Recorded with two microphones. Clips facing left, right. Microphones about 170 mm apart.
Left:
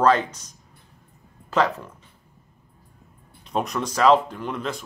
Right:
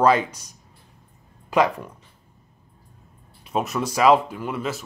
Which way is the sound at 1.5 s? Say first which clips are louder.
Right 2 dB; 10° right (ahead or behind).